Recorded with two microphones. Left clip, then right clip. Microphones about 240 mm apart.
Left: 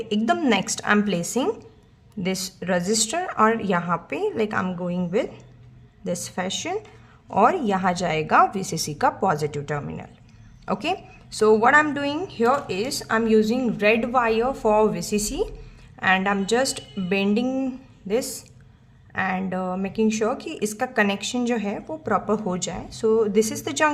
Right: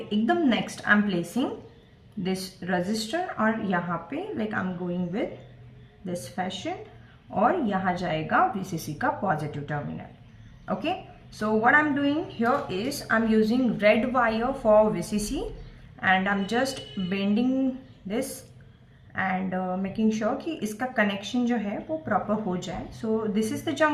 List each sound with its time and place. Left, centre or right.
0.1 s a woman's voice: left
19.1 s a woman's voice: left